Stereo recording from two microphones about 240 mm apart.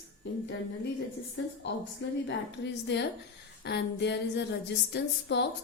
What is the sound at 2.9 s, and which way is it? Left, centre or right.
Speech, left.